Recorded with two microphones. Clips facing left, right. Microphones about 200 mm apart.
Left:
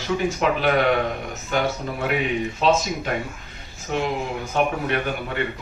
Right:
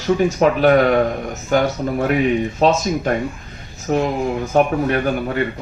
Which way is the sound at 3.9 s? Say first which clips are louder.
Right 6 dB; 45° right (ahead or behind).